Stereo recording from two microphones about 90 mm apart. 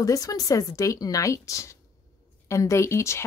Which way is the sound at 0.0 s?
40° left (ahead or behind).